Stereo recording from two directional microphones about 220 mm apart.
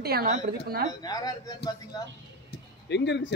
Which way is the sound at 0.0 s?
45° right (ahead or behind).